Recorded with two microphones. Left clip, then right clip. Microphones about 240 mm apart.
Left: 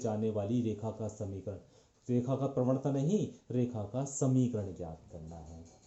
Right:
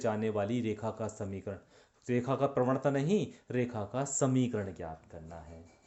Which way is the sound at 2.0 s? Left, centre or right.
Right.